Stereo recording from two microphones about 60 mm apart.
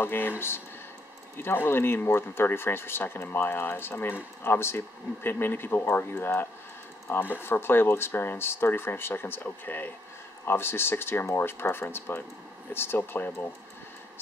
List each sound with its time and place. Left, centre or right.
0.0 s speech: left
1.3 s speech: left